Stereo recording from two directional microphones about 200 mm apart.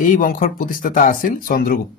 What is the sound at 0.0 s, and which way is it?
Speech, 40° left (ahead or behind).